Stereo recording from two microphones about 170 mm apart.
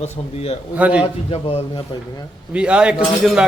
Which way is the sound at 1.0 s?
35° left (ahead or behind).